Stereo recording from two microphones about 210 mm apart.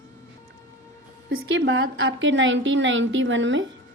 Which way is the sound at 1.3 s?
70° right (ahead or behind).